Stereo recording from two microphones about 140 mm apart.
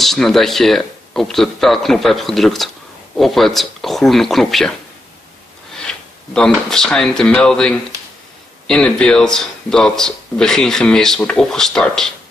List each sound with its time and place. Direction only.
0.0 s speech: centre (ahead or behind)
5.8 s speech: 5° left (ahead or behind)